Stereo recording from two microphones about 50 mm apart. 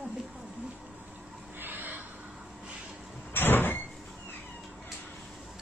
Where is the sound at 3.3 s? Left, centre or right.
Left.